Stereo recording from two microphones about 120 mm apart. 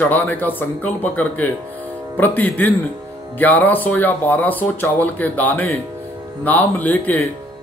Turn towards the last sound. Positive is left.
turn(degrees=15)  # may be behind; listen again after turning